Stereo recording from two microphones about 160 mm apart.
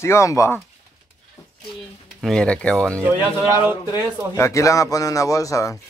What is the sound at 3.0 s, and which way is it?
Speech, 20° right (ahead or behind).